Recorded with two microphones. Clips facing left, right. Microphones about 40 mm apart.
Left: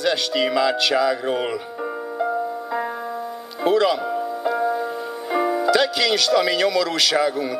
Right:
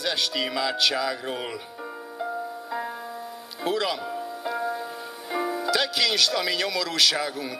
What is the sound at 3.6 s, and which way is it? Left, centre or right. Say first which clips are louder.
Speech: left 8 dB; centre.